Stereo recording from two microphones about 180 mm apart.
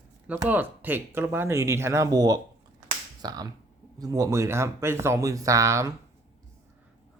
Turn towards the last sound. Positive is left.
turn(degrees=-15)  # may be behind; listen again after turning